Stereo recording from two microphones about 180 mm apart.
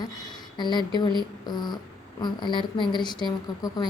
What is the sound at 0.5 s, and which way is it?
A woman's voice, 25° left (ahead or behind).